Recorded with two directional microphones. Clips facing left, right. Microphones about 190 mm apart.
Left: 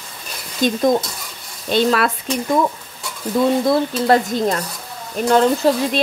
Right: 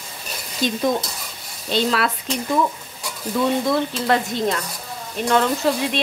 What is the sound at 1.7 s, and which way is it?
Speech, 50° left (ahead or behind).